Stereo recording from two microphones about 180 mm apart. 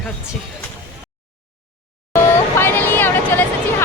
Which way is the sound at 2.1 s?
10° left (ahead or behind).